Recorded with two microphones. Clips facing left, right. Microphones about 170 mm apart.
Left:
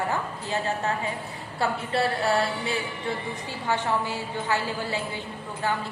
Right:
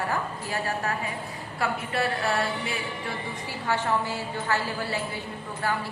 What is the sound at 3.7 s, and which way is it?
A woman's voice, 15° left (ahead or behind).